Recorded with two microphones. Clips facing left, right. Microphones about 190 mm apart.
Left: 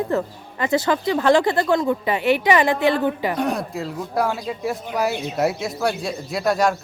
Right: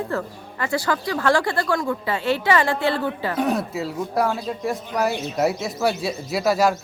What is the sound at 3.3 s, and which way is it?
Speech, centre (ahead or behind).